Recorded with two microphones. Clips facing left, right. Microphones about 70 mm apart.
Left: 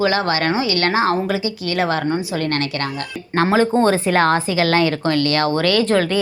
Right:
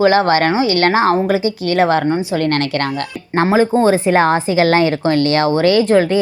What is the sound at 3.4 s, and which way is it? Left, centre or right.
Speech, centre.